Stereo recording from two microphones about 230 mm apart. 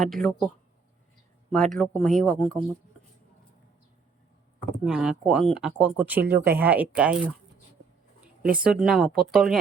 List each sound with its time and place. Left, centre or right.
0.0 s speech: centre
1.5 s speech: centre
4.9 s speech: centre
6.2 s speech: right
6.5 s speech: centre
8.4 s speech: right
8.6 s speech: centre